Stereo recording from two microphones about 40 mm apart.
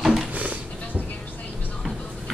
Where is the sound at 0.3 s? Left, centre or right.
Right.